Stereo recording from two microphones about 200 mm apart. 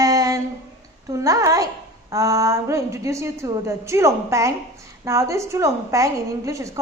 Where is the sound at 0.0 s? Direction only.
15° right (ahead or behind).